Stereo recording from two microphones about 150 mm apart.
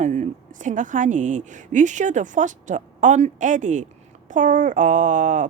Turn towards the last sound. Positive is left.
turn(degrees=-55)  # may be behind; listen again after turning